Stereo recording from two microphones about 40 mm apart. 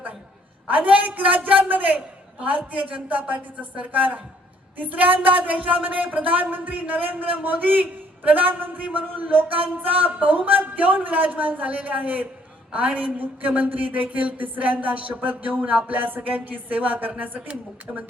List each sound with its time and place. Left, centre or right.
0.7 s speech: right
15.9 s a woman's voice: right